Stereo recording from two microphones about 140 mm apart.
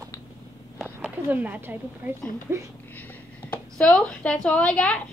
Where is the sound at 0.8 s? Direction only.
10° right (ahead or behind).